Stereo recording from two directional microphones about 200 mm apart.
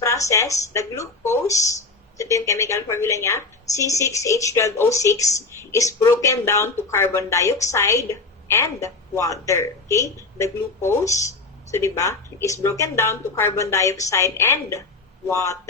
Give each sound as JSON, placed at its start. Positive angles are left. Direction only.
{"t": 0.0, "sound": "speech", "side_deg": 15}